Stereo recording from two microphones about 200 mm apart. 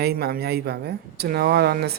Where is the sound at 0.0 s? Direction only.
50° right (ahead or behind).